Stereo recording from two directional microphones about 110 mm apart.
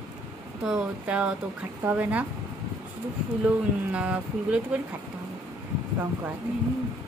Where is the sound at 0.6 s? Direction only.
10° right (ahead or behind).